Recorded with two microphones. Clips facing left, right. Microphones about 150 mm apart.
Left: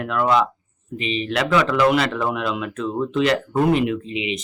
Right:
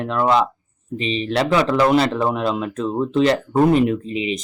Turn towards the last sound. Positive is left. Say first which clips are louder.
# right 2 dB
turn(degrees=-40)  # may be behind; listen again after turning